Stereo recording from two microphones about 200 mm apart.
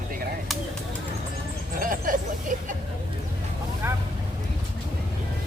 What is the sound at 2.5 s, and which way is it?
Vehicle, 40° right (ahead or behind).